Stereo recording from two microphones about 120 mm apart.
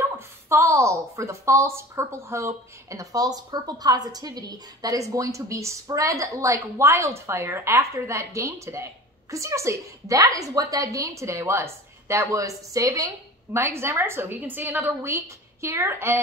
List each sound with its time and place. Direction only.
0.2 s a woman's voice: 20° right (ahead or behind)